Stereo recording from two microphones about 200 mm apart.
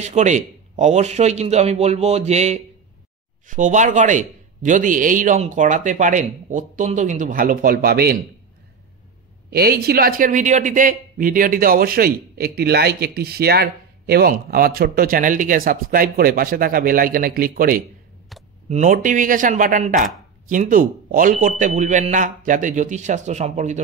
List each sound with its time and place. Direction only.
0.0 s a man's voice: 35° right (ahead or behind); by 8.2 s 50° right (ahead or behind)
9.5 s a man's voice: 50° right (ahead or behind)
18.3 s a sound: centre (ahead or behind)
18.7 s a man's voice: 35° right (ahead or behind)